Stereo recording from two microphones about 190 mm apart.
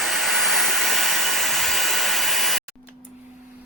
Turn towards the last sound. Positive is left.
turn(degrees=0)  # may be behind; listen again after turning